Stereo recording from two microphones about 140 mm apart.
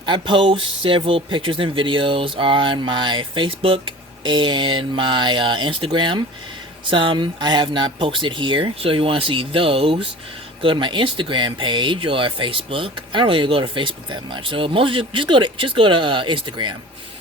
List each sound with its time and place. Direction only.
0.0 s speech: 35° right (ahead or behind)